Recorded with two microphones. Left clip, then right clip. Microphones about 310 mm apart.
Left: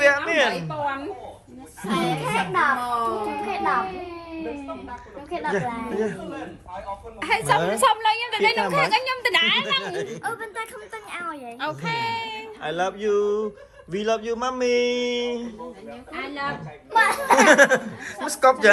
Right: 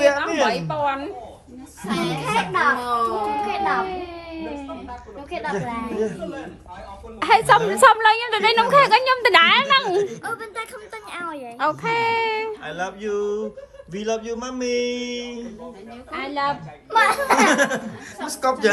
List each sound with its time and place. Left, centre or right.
0.0 s a sound: centre
0.5 s a woman's voice: centre
5.3 s a woman's voice: centre
7.3 s a woman's voice: right
10.0 s a woman's voice: centre
11.8 s speech: right
12.6 s a woman's voice: centre
16.9 s a woman's voice: centre